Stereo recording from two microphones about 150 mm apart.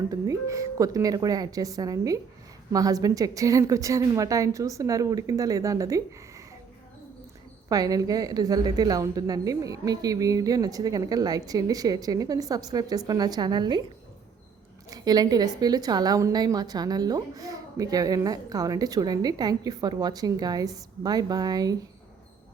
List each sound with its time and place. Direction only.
0.1 s a woman's voice: 20° right (ahead or behind)
7.7 s a woman's voice: 25° right (ahead or behind)
14.8 s a woman's voice: 25° right (ahead or behind)